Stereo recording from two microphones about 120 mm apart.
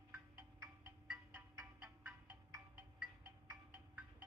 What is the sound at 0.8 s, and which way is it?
Music, 20° right (ahead or behind).